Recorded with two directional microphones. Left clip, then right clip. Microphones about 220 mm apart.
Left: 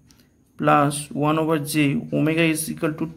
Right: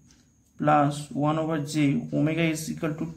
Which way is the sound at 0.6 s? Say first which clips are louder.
Left 4 dB; 30° left (ahead or behind).